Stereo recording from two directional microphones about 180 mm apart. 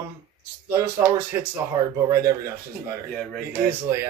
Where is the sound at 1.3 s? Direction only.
15° right (ahead or behind).